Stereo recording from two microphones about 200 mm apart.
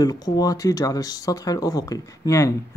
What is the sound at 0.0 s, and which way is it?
Speech, 20° left (ahead or behind).